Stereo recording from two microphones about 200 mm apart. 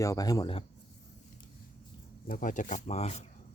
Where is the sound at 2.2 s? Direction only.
45° left (ahead or behind).